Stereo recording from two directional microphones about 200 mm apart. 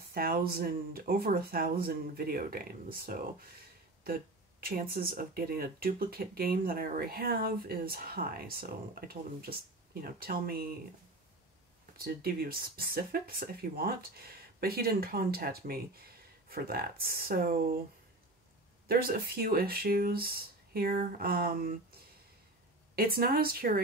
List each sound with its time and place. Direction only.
0.1 s speech: 50° right (ahead or behind)
4.6 s speech: 50° right (ahead or behind)
12.0 s speech: 50° right (ahead or behind)
18.9 s speech: 50° right (ahead or behind)
22.9 s speech: 50° right (ahead or behind)